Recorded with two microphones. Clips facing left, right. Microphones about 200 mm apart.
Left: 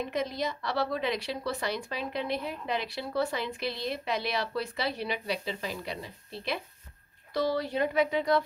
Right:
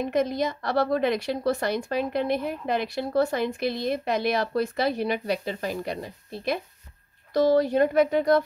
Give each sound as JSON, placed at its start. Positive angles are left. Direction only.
{"t": 0.0, "sound": "speech", "side_deg": -50}